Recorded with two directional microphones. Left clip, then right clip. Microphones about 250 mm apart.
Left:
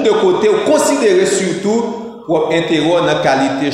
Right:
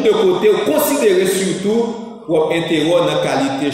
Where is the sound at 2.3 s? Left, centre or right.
Centre.